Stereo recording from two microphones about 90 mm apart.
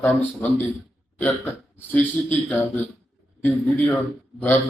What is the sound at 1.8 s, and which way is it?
A man's voice, 20° left (ahead or behind).